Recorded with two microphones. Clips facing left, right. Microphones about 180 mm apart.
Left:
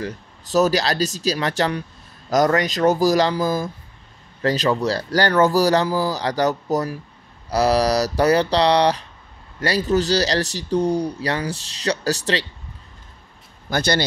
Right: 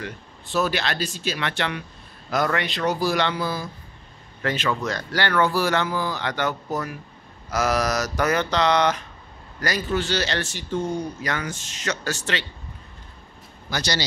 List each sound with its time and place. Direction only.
0.0 s speech: 40° left (ahead or behind)
13.7 s a man's voice: 55° left (ahead or behind)